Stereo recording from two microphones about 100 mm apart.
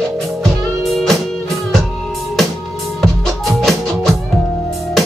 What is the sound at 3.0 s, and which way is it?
Music, centre (ahead or behind).